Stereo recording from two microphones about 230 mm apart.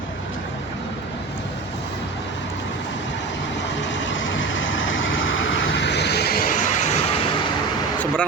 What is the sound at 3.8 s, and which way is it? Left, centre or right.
Vehicle, left.